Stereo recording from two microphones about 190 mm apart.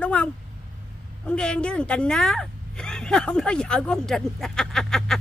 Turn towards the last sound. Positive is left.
turn(degrees=0)  # may be behind; listen again after turning